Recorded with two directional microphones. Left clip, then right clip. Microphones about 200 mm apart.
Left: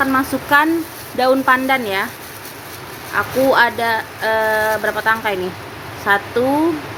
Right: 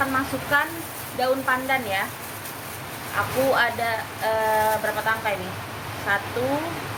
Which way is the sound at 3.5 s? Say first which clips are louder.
Left 8 dB; 60° left (ahead or behind).